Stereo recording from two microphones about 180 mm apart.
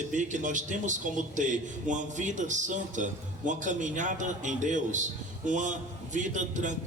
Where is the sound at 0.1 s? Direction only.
45° right (ahead or behind).